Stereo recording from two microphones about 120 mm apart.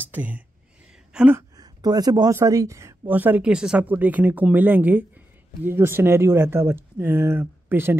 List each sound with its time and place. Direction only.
0.0 s a sound: 15° right (ahead or behind)
1.6 s speech: 35° right (ahead or behind)
3.1 s speech: 15° right (ahead or behind)